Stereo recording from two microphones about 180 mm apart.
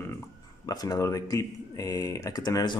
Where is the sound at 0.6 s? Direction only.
20° left (ahead or behind).